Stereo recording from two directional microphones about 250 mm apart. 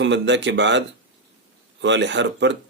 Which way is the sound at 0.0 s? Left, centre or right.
Right.